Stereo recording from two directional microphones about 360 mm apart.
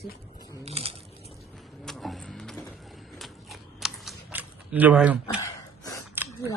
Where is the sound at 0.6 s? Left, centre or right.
Centre.